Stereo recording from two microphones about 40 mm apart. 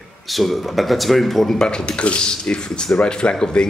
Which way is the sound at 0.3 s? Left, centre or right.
Centre.